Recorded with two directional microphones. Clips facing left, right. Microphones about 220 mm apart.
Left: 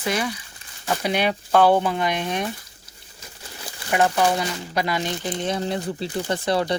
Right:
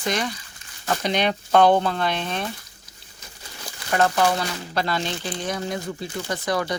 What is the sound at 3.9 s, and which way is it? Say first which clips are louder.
Speech: left 1 dB; 15° left (ahead or behind).